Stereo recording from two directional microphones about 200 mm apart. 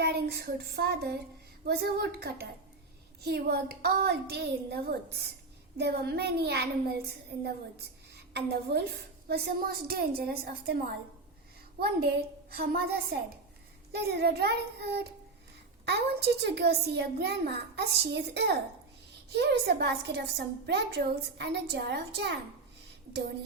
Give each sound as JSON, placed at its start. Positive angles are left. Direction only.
{"t": 0.0, "sound": "a sound", "side_deg": -55}
{"t": 1.6, "sound": "a woman's voice", "side_deg": -55}
{"t": 8.1, "sound": "a woman's voice", "side_deg": -55}